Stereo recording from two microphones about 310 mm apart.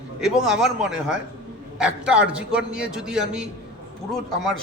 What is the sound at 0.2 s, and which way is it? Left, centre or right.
A man's voice, centre.